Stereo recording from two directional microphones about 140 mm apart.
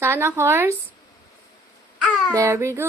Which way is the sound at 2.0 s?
5° left (ahead or behind).